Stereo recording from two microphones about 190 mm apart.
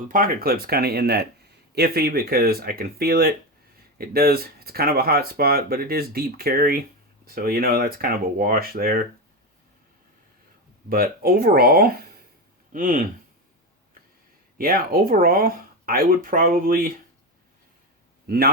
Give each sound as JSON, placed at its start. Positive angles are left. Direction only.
{"t": 0.1, "sound": "speech", "side_deg": -50}
{"t": 10.8, "sound": "speech", "side_deg": -50}
{"t": 14.6, "sound": "speech", "side_deg": -50}
{"t": 18.3, "sound": "speech", "side_deg": -55}